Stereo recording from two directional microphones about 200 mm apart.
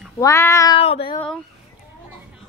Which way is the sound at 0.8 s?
30° left (ahead or behind).